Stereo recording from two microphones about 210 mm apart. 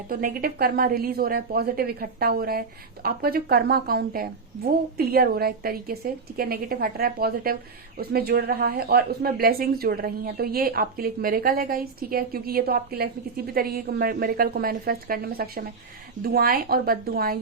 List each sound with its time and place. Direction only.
0.1 s speech: 45° right (ahead or behind)